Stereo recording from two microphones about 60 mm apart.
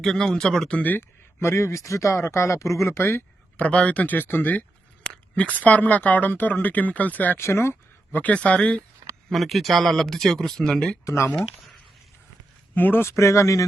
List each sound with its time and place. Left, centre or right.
0.0 s speech: centre
0.7 s speech: left
1.4 s speech: left
3.0 s speech: left
3.6 s speech: left
5.0 s speech: centre
7.3 s speech: left
8.1 s speech: left
9.3 s speech: centre
11.0 s speech: left
11.3 s speech: centre
12.7 s speech: left
13.1 s speech: left